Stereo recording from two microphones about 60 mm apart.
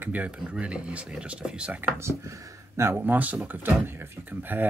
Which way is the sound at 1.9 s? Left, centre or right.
Right.